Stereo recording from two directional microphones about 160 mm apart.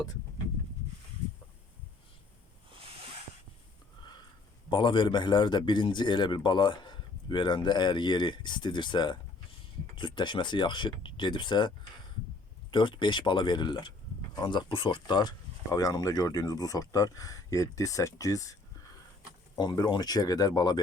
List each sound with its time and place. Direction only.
4.7 s a man's voice: 30° left (ahead or behind)
12.7 s a man's voice: 30° left (ahead or behind)
19.5 s a man's voice: 25° left (ahead or behind)